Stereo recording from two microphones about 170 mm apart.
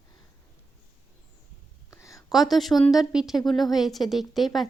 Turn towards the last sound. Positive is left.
turn(degrees=0)  # may be behind; listen again after turning